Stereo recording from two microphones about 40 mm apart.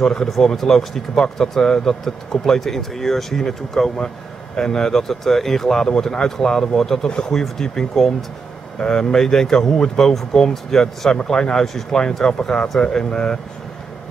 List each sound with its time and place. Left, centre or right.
0.0 s speech: centre
7.3 s speech: centre; by 13.4 s left